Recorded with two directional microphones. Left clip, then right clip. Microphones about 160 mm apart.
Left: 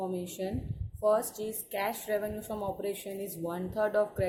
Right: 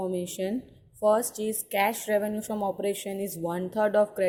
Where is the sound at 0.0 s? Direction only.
45° right (ahead or behind).